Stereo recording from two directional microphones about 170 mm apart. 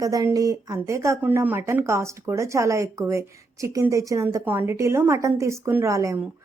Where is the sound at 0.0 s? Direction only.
20° right (ahead or behind).